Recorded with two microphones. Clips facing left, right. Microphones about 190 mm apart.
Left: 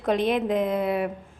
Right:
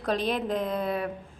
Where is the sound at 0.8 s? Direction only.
5° left (ahead or behind).